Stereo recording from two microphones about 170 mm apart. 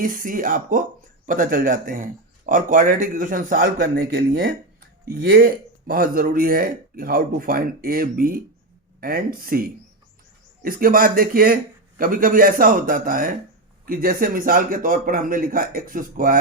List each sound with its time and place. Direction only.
0.0 s a man's voice: 55° right (ahead or behind)